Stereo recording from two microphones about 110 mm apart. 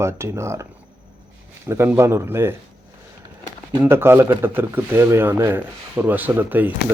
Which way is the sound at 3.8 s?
20° right (ahead or behind).